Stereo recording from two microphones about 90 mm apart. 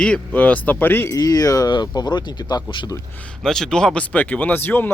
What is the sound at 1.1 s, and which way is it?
Speech, 45° left (ahead or behind).